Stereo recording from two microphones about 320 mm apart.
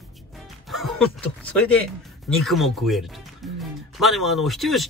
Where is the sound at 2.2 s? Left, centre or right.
Centre.